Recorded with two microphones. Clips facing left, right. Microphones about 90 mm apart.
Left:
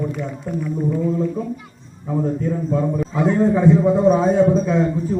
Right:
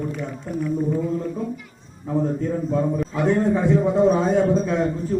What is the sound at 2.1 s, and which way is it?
A man's voice, centre (ahead or behind).